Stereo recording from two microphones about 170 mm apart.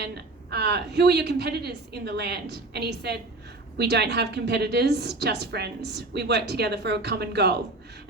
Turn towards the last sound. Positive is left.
turn(degrees=-75)  # may be behind; listen again after turning